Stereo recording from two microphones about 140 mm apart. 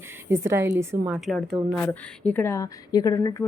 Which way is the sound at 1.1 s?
Centre (ahead or behind).